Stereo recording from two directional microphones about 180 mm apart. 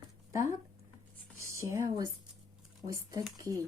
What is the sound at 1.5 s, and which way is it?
Speech, 15° right (ahead or behind).